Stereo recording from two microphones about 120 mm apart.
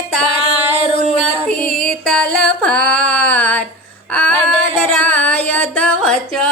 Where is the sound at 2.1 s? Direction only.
5° left (ahead or behind).